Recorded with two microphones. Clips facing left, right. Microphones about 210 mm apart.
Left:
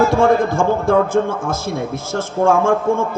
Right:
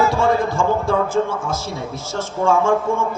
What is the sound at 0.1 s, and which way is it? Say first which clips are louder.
A man's voice: left 4 dB; 55° left (ahead or behind).